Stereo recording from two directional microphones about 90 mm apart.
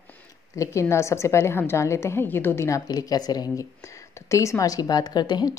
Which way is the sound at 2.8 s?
45° left (ahead or behind).